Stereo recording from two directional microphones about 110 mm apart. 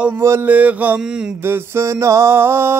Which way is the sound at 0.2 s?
25° right (ahead or behind).